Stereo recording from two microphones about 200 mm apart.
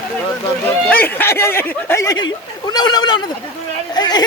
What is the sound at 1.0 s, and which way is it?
Speech, 10° left (ahead or behind).